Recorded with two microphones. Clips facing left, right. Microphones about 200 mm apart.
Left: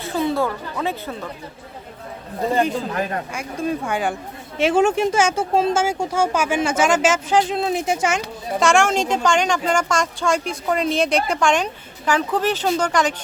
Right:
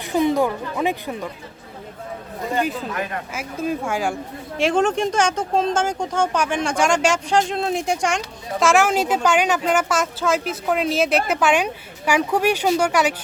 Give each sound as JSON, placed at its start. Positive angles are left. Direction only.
{"t": 0.0, "sound": "speech", "side_deg": -15}
{"t": 3.3, "sound": "speech", "side_deg": -5}